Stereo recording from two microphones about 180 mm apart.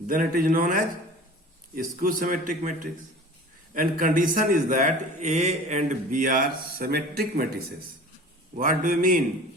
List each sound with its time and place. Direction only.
0.1 s a man's voice: 50° right (ahead or behind)
8.5 s a man's voice: 50° right (ahead or behind)